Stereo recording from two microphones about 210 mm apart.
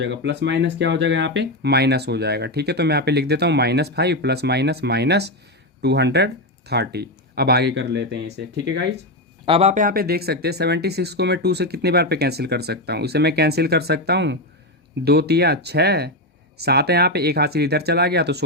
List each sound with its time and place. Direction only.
0.0 s speech: 55° right (ahead or behind)
9.5 s speech: 30° right (ahead or behind); by 18.4 s 50° right (ahead or behind)